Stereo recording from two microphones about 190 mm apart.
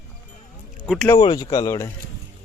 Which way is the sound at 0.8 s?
5° right (ahead or behind).